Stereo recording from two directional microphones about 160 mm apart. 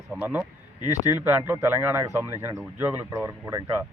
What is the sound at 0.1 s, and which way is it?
Speech, 10° right (ahead or behind).